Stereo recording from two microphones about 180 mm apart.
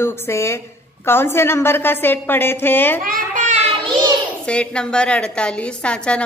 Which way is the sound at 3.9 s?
25° right (ahead or behind).